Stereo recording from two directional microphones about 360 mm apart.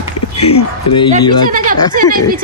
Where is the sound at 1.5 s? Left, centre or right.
Right.